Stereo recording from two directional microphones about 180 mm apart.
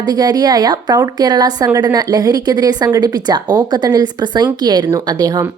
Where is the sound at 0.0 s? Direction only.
20° right (ahead or behind).